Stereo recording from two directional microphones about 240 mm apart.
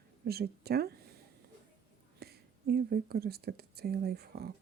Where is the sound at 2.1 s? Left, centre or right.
Right.